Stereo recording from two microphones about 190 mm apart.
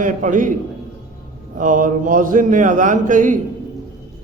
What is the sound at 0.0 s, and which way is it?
Speech, 45° right (ahead or behind).